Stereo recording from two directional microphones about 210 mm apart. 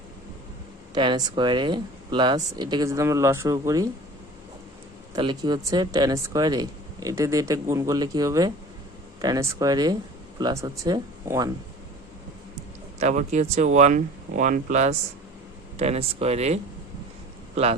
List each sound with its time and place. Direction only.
0.9 s speech: 20° right (ahead or behind)
5.1 s speech: 20° right (ahead or behind)
13.0 s speech: 35° right (ahead or behind)